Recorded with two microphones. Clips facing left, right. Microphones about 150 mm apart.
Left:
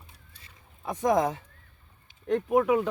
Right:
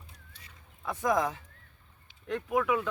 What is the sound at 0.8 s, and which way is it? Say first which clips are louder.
Speech: left 4 dB; 20° left (ahead or behind).